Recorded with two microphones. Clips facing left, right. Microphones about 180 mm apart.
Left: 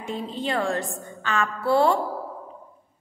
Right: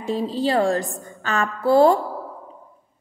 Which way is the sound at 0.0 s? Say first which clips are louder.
Right 7 dB; 35° right (ahead or behind).